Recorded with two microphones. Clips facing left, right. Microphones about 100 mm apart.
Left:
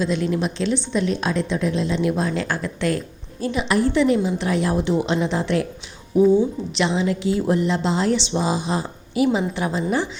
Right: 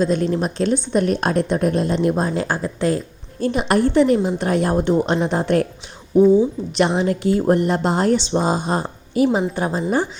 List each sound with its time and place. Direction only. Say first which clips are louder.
0.0 s speech: right 3 dB; 45° right (ahead or behind)
3.4 s speech: right 3 dB; 50° right (ahead or behind)
6.7 s a woman's voice: right 3 dB; 50° right (ahead or behind)